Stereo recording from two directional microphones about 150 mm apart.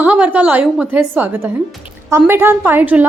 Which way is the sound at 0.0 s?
10° right (ahead or behind).